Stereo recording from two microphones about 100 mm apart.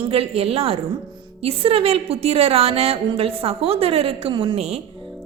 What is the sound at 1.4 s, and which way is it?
A woman's voice, 70° right (ahead or behind).